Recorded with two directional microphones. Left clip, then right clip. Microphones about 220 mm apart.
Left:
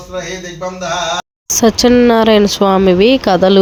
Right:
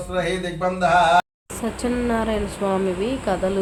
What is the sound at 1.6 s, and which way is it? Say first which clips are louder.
A woman's voice: left 15 dB; 35° left (ahead or behind).